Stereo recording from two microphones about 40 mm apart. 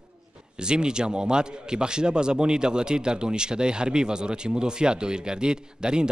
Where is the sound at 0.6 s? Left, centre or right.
Right.